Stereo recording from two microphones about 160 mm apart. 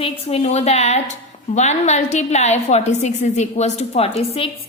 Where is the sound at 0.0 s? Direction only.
40° left (ahead or behind).